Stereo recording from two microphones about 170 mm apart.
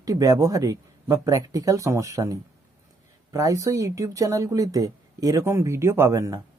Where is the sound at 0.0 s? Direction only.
20° right (ahead or behind).